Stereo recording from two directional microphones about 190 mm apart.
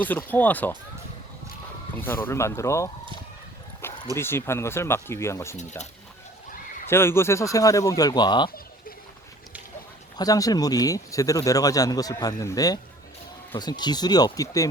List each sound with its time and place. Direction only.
0.0 s speech: 10° left (ahead or behind)
2.0 s speech: 10° left (ahead or behind)
3.8 s dog: 10° left (ahead or behind)
4.2 s speech: 10° left (ahead or behind)
5.5 s speech: 35° left (ahead or behind)
6.8 s speech: 10° left (ahead or behind)
10.2 s speech: 20° left (ahead or behind)